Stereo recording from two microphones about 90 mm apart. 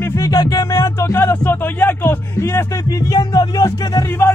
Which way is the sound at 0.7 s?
35° left (ahead or behind).